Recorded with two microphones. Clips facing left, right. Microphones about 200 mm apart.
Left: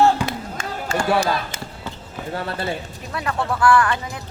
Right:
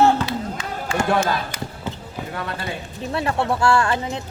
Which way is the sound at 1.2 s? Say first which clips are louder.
Even; 25° left (ahead or behind).